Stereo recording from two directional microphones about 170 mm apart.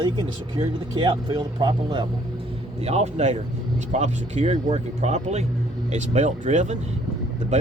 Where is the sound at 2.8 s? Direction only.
40° right (ahead or behind).